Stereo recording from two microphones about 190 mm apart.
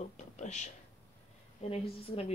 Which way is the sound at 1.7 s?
30° left (ahead or behind).